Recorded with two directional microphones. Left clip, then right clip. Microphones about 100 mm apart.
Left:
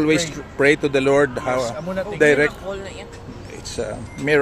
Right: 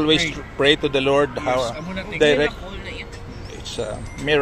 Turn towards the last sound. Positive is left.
turn(degrees=90)